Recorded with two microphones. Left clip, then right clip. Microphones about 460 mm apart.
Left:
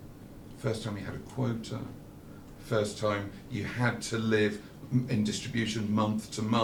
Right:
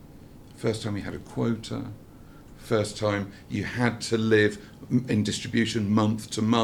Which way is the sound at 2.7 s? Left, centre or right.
Right.